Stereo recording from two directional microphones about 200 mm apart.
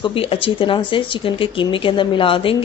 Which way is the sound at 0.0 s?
30° left (ahead or behind).